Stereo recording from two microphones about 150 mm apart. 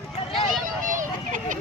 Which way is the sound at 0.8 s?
60° right (ahead or behind).